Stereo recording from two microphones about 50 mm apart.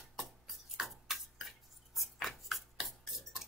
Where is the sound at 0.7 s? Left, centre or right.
Centre.